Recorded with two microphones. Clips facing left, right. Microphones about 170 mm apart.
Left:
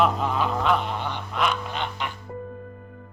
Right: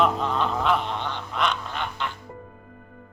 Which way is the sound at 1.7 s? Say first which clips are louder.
Left 1 dB; 15° left (ahead or behind).